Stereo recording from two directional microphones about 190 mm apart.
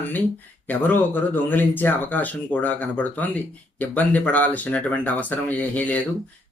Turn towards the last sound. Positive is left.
turn(degrees=10)  # may be behind; listen again after turning